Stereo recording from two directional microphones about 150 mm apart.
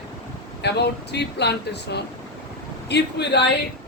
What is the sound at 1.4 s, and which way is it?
Speech, 90° left.